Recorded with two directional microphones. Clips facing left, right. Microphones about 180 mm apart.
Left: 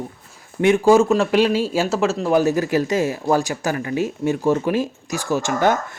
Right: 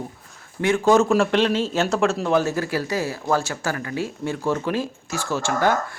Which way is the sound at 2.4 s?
15° left (ahead or behind).